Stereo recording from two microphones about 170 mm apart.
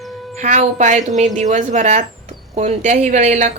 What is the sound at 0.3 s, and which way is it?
Speech, 45° right (ahead or behind).